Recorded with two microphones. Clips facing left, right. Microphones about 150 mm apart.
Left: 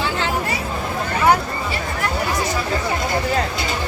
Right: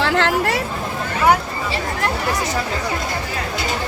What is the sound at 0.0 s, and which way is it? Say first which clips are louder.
Hubbub: right 4 dB; 75° right (ahead or behind).